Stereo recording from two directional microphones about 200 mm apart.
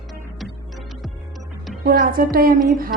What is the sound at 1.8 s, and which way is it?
Speech, 50° right (ahead or behind).